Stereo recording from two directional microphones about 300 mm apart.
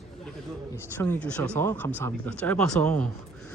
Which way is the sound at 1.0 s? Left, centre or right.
Centre.